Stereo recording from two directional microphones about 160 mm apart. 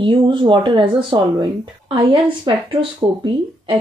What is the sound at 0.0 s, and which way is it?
Speech, 30° right (ahead or behind).